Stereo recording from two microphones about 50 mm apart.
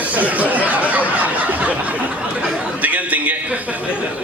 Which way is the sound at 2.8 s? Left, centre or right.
Right.